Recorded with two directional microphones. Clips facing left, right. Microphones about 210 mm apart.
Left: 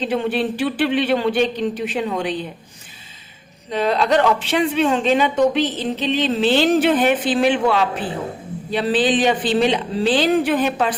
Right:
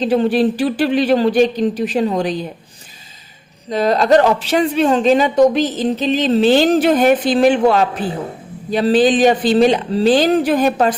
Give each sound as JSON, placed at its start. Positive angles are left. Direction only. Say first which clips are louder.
{"t": 0.0, "sound": "speech", "louder": "right 6 dB", "side_deg": -40}
{"t": 3.7, "sound": "speech", "louder": "right 5 dB", "side_deg": -40}